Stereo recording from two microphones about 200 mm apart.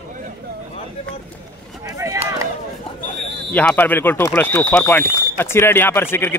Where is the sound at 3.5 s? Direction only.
10° left (ahead or behind).